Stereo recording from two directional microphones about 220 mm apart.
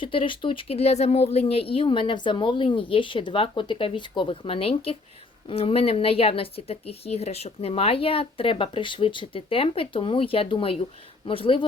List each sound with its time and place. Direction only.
0.0 s a woman's voice: 25° left (ahead or behind)